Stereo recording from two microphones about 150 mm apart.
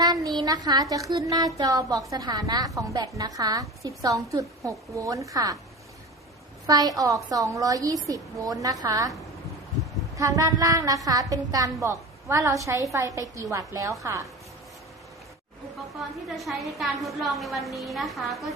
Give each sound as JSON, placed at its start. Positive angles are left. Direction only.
{"t": 0.0, "sound": "a sound", "side_deg": -25}
{"t": 0.3, "sound": "a woman's voice", "side_deg": -25}
{"t": 6.7, "sound": "a woman's voice", "side_deg": -25}
{"t": 10.2, "sound": "a woman's voice", "side_deg": -20}
{"t": 15.9, "sound": "a woman's voice", "side_deg": 0}